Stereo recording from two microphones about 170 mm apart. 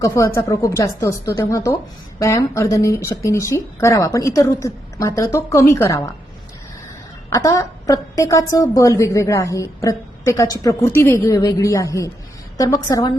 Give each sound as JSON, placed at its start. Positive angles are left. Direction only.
{"t": 0.0, "sound": "a woman's voice", "side_deg": 15}
{"t": 7.3, "sound": "a woman's voice", "side_deg": 15}